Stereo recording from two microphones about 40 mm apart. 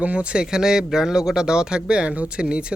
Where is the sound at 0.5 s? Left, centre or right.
Centre.